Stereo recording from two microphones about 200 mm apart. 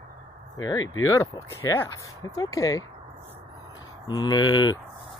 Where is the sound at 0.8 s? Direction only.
85° left.